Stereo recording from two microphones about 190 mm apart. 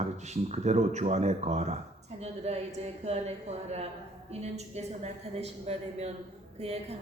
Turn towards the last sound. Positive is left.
turn(degrees=-35)  # may be behind; listen again after turning